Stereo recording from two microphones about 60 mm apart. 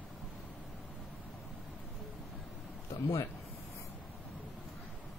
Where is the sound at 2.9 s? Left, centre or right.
Left.